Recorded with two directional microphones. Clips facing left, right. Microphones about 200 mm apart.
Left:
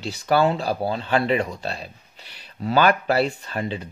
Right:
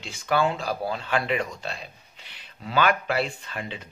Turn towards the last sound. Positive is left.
turn(degrees=35)  # may be behind; listen again after turning